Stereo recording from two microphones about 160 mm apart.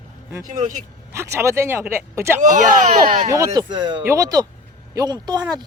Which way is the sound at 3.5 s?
30° right (ahead or behind).